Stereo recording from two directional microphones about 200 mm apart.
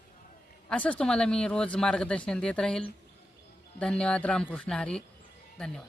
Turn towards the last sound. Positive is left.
turn(degrees=5)  # may be behind; listen again after turning